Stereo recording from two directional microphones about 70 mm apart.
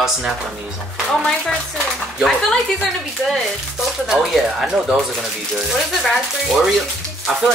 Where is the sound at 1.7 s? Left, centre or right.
Centre.